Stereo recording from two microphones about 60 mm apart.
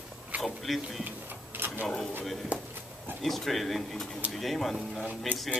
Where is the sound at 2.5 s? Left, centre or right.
Right.